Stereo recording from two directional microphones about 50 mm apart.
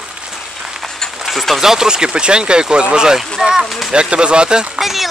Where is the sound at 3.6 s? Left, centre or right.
Centre.